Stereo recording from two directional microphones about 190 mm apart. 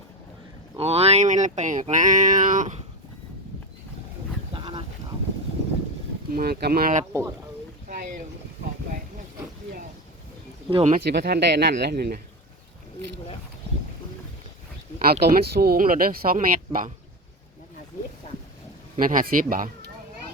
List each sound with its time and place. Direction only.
0.8 s speech: 35° right (ahead or behind)
4.5 s a sound: 30° right (ahead or behind)
6.3 s speech: 55° right (ahead or behind)
7.1 s speech: 15° right (ahead or behind)
10.7 s speech: 30° right (ahead or behind)
10.9 s speech: 60° right (ahead or behind)
15.2 s speech: 55° right (ahead or behind)
18.9 s speech: 45° right (ahead or behind)